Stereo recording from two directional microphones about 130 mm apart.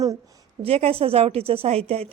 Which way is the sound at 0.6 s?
50° right (ahead or behind).